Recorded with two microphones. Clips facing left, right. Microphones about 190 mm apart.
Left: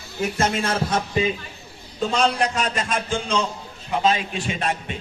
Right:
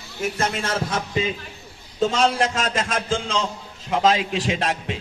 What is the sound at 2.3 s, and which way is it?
A man's voice, 90° right.